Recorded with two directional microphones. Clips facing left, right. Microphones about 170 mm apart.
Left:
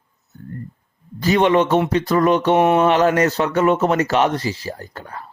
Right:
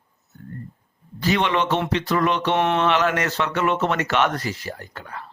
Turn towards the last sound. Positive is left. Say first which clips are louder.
# left 3 dB
turn(degrees=40)  # may be behind; listen again after turning